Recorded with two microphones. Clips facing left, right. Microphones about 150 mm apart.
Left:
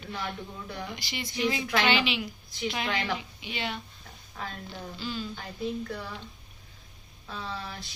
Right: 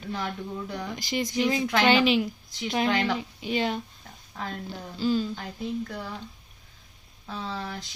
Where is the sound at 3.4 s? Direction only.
40° right (ahead or behind).